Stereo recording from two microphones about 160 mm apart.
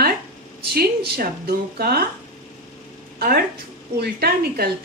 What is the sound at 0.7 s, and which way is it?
A woman's voice, 80° right.